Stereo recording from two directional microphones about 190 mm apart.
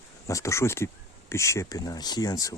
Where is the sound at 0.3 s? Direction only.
15° left (ahead or behind).